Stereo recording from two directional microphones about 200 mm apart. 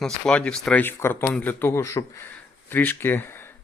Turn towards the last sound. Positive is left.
turn(degrees=10)  # may be behind; listen again after turning